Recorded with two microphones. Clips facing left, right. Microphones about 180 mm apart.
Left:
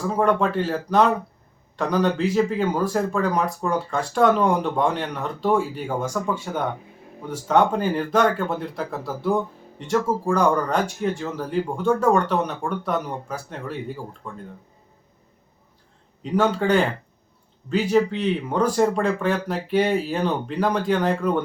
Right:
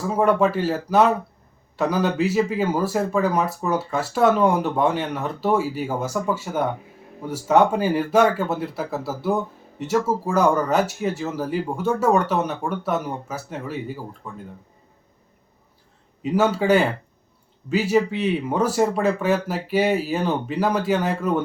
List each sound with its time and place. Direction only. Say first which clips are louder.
0.1 s speech: right 2 dB; 5° right (ahead or behind)
16.2 s speech: right 1 dB; 5° right (ahead or behind)